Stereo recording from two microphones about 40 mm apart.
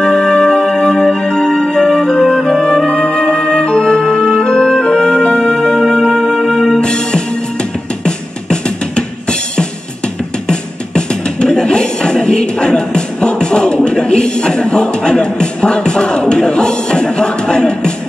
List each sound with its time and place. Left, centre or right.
0.0 s music: left
10.5 s music: left